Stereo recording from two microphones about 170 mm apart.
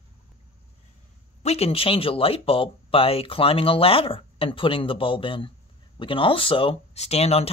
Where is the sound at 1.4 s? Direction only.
35° left (ahead or behind).